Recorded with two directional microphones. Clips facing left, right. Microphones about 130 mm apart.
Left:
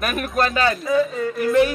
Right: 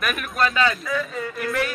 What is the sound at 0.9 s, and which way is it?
Speech, 25° left (ahead or behind).